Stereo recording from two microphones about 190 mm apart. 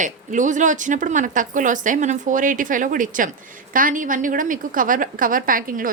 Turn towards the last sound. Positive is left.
turn(degrees=-45)  # may be behind; listen again after turning